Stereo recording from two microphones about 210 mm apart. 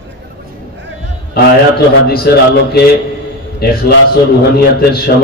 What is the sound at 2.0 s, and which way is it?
A man's voice, 45° left (ahead or behind).